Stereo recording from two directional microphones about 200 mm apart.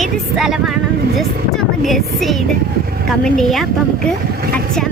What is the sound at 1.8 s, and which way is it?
Speech, centre (ahead or behind).